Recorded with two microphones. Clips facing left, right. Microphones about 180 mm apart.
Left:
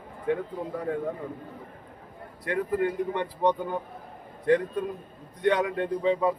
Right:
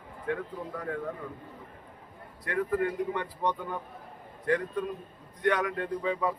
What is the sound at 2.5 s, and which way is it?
A man's voice, 25° left (ahead or behind).